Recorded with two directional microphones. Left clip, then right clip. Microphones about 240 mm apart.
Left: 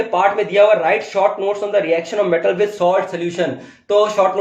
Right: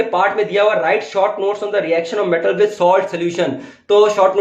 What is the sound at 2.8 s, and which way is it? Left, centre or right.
Speech, right.